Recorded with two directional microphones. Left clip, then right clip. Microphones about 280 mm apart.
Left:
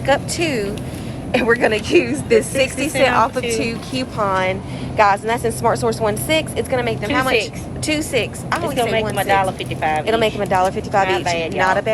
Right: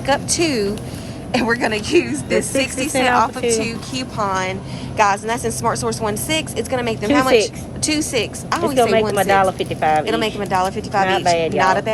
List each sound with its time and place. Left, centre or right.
0.0 s speech: centre
8.7 s speech: right
10.1 s speech: centre
11.0 s speech: right
11.5 s speech: centre